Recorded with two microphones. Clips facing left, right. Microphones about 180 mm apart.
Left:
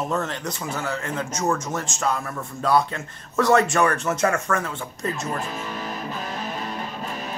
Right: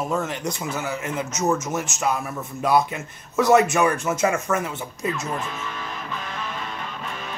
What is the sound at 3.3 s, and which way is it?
Speech, 15° right (ahead or behind).